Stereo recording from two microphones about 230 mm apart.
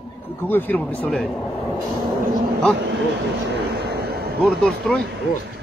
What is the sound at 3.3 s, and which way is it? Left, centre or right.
Vehicle, right.